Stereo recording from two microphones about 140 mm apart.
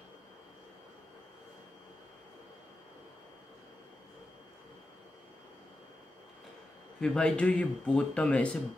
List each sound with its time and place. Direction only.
7.0 s speech: 5° left (ahead or behind)